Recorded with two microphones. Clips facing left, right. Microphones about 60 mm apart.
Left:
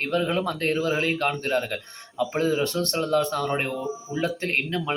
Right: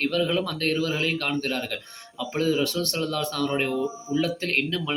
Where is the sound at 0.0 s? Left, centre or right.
Left.